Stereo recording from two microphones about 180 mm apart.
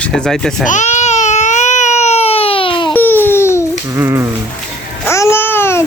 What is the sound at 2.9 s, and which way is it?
Baby cry, 10° left (ahead or behind).